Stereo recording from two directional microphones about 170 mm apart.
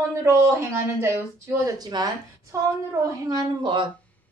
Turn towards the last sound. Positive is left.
turn(degrees=-25)  # may be behind; listen again after turning